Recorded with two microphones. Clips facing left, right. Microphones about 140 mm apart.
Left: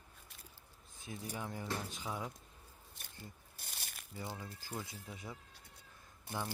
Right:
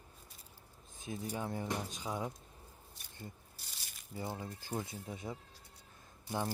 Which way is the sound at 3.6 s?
55° left (ahead or behind).